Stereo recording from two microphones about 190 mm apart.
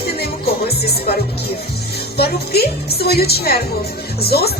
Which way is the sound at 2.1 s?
55° left (ahead or behind).